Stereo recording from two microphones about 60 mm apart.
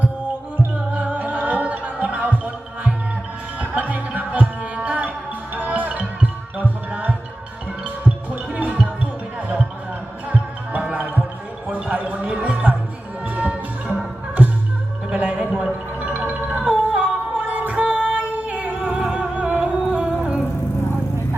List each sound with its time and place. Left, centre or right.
0.9 s music: right
8.5 s music: right
10.2 s music: right
11.7 s a sound: right
12.4 s music: right
15.1 s music: right
17.8 s singing: centre